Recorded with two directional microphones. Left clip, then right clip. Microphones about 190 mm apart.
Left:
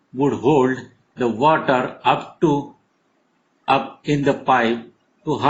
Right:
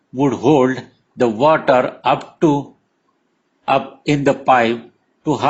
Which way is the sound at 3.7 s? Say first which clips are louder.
Right 2 dB; 40° right (ahead or behind).